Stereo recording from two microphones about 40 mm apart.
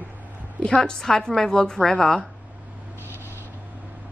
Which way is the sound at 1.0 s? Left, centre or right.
Centre.